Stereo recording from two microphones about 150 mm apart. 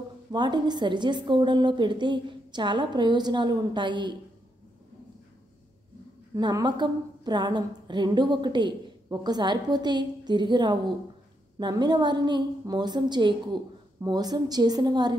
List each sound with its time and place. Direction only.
0.3 s a woman's voice: 30° right (ahead or behind)
6.3 s a woman's voice: 25° right (ahead or behind)